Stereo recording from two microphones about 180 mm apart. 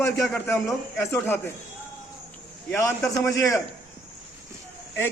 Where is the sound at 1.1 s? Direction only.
15° left (ahead or behind).